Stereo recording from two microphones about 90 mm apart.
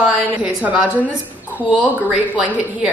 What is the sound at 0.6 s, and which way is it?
A woman's voice, 15° right (ahead or behind).